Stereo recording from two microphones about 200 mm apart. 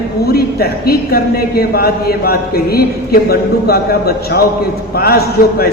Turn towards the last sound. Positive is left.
turn(degrees=50)  # may be behind; listen again after turning